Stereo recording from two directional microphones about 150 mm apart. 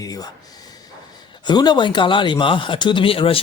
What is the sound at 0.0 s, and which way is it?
Speech, 25° left (ahead or behind).